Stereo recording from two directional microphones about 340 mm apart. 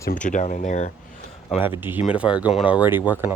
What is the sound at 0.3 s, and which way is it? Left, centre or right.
Speech, left.